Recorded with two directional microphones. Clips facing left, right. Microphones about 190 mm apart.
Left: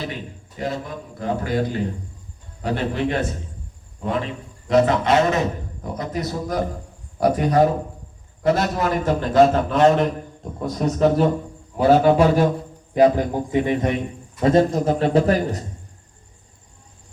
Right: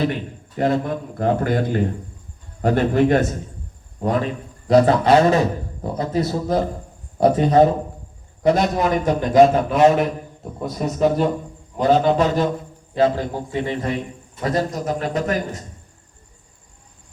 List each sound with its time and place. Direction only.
0.0 s a man's voice: 55° right (ahead or behind); by 11.3 s centre (ahead or behind)
11.8 s a man's voice: 10° left (ahead or behind); by 15.6 s 35° left (ahead or behind)